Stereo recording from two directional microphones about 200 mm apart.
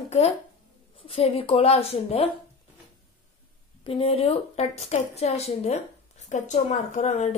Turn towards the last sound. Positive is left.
turn(degrees=35)  # may be behind; listen again after turning